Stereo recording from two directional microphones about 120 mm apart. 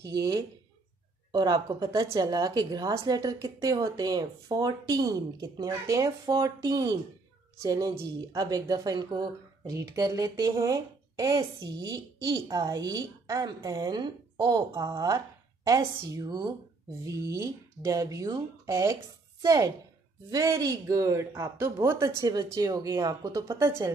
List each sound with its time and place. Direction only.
0.0 s speech: 30° right (ahead or behind)